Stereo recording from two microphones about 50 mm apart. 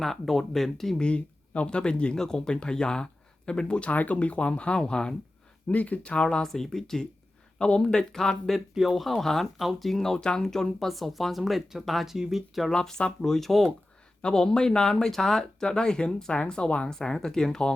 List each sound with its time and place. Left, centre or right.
0.0 s speech: centre
1.0 s speech: left
5.6 s speech: left
6.5 s speech: centre
8.7 s speech: centre
12.7 s speech: centre
14.2 s speech: centre